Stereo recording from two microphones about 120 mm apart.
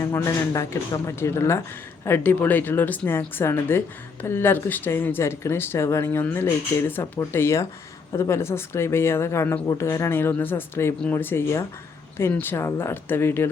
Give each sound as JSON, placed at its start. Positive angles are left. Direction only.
{"t": 0.0, "sound": "speech", "side_deg": 25}